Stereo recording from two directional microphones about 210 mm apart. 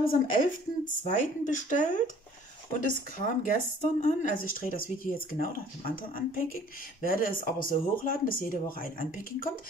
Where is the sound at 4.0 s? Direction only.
40° left (ahead or behind).